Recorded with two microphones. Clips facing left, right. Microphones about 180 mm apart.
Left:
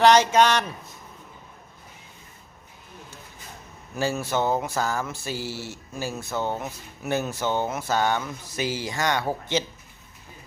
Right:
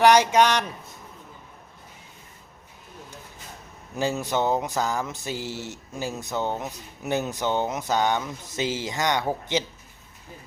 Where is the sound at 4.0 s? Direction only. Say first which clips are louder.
Even; 20° right (ahead or behind).